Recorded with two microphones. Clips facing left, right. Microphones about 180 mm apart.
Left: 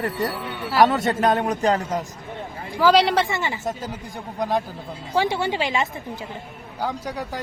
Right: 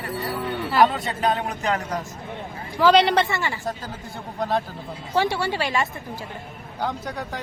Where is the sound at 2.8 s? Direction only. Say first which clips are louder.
Even; centre (ahead or behind).